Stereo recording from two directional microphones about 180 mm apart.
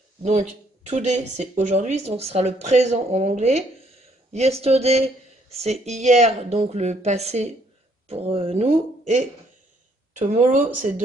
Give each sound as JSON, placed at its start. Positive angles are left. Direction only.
{"t": 0.2, "sound": "speech", "side_deg": -40}